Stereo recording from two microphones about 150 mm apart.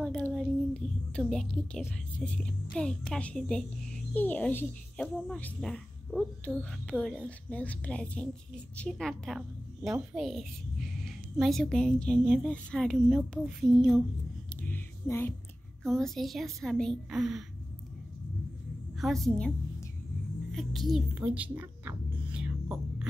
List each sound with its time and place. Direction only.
0.0 s a sound: 5° left (ahead or behind)
2.1 s a child's voice: 10° left (ahead or behind)
14.6 s a sound: 15° left (ahead or behind)
15.8 s a woman's voice: centre (ahead or behind)
18.9 s a woman's voice: centre (ahead or behind)
20.5 s a woman's voice: centre (ahead or behind)
21.2 s music: 10° right (ahead or behind)